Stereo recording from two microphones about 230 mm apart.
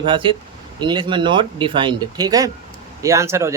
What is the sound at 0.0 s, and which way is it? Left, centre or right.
Speech, right.